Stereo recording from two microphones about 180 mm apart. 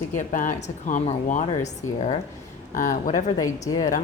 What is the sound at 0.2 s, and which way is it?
Speech, 45° left (ahead or behind).